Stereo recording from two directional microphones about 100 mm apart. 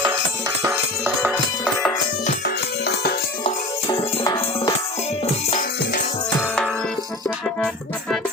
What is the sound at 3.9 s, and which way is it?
Music, 45° left (ahead or behind).